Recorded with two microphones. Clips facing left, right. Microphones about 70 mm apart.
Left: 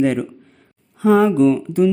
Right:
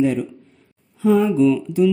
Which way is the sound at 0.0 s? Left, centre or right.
Left.